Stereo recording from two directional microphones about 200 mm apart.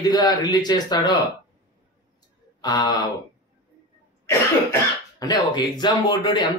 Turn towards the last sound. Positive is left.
turn(degrees=20)  # may be behind; listen again after turning